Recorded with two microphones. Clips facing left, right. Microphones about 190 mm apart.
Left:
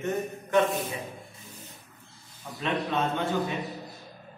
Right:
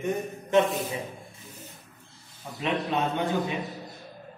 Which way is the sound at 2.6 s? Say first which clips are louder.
Right 1 dB; 15° right (ahead or behind).